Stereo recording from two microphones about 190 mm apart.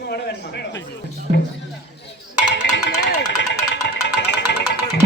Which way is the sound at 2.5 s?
65° left (ahead or behind).